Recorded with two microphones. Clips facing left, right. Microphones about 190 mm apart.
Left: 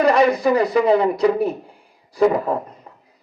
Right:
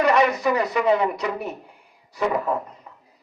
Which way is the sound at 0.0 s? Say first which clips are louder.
Left 4 dB; 30° left (ahead or behind).